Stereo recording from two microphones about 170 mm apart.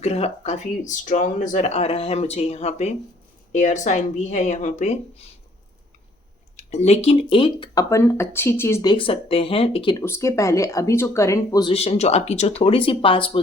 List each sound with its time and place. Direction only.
0.0 s speech: 40° left (ahead or behind)
6.6 s speech: 40° left (ahead or behind)
7.9 s speech: 15° left (ahead or behind)
10.0 s speech: 15° left (ahead or behind)
11.6 s speech: 35° left (ahead or behind)